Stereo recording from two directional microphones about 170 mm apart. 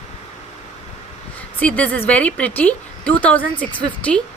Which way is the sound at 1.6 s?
10° left (ahead or behind).